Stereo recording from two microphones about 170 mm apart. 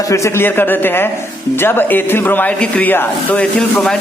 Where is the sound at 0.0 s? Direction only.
15° left (ahead or behind).